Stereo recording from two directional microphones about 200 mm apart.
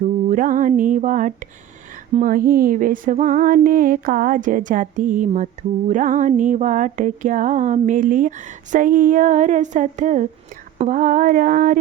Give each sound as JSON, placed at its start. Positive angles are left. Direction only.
{"t": 0.3, "sound": "music", "side_deg": -40}